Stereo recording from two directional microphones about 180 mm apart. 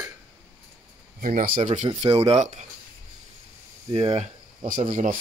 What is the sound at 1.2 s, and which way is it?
Speech, 50° right (ahead or behind).